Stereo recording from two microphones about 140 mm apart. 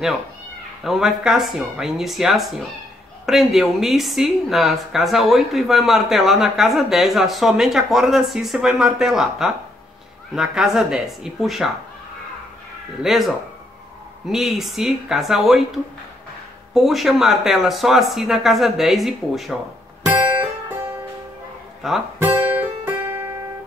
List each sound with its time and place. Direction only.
0.8 s speech: 5° right (ahead or behind)
13.0 s speech: centre (ahead or behind)
14.2 s speech: centre (ahead or behind)
21.8 s speech: centre (ahead or behind)
22.2 s guitar: 15° right (ahead or behind)